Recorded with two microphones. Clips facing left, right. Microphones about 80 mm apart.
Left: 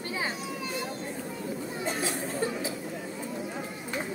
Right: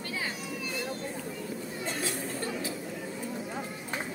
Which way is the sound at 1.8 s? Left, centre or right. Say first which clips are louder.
Left 3 dB; centre.